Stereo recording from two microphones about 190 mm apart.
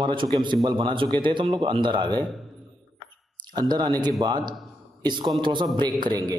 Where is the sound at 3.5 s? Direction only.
20° right (ahead or behind).